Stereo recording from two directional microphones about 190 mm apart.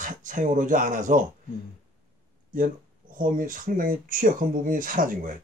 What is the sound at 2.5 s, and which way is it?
Speech, 45° right (ahead or behind).